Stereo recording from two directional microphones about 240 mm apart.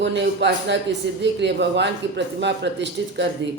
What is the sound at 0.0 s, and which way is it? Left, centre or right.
Speech, right.